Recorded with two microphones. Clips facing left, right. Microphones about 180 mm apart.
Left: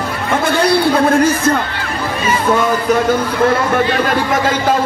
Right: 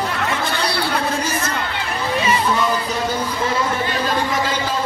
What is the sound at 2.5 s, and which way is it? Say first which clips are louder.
A man's voice: left 7 dB; 55° left (ahead or behind).